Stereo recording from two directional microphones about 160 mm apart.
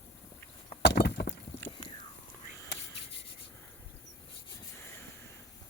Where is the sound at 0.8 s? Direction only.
90° left.